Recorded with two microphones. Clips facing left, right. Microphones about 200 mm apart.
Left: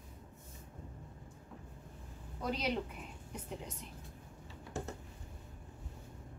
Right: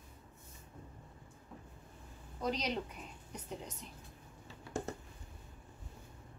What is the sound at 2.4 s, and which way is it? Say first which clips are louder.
Speech: even; 5° left (ahead or behind).